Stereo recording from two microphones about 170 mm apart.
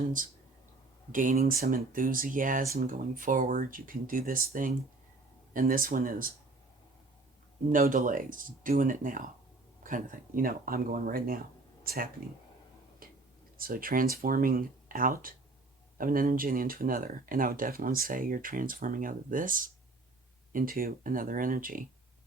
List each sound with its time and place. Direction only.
1.1 s speech: 50° right (ahead or behind)
7.7 s speech: 50° right (ahead or behind)
13.0 s whispering: 55° right (ahead or behind)
13.6 s speech: 55° right (ahead or behind)